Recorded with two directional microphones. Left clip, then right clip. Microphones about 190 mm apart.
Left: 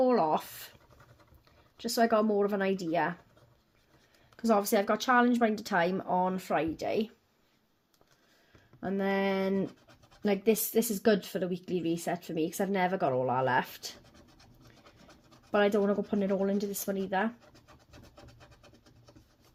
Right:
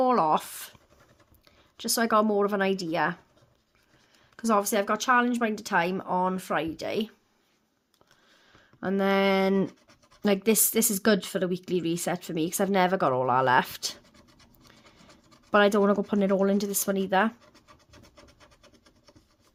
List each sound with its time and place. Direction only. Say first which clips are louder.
0.0 s a sound: right 4 dB; 25° right (ahead or behind)
1.7 s speech: right 3 dB; 25° right (ahead or behind)
4.4 s a woman's voice: right 2 dB; 15° right (ahead or behind)
8.8 s speech: right 6 dB; 35° right (ahead or behind)
15.5 s speech: right 5 dB; 40° right (ahead or behind)